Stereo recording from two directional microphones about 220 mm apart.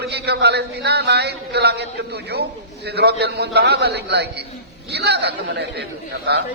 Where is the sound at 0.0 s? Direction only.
50° right (ahead or behind).